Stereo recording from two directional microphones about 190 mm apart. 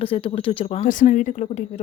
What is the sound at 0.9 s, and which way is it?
Speech, 40° left (ahead or behind).